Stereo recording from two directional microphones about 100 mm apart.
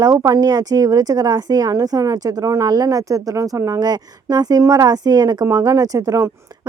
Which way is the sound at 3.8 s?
40° right (ahead or behind).